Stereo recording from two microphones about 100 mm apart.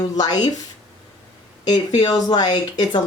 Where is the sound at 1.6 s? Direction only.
45° left (ahead or behind).